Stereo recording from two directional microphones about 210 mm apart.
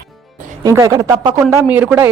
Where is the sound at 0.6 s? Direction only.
15° right (ahead or behind).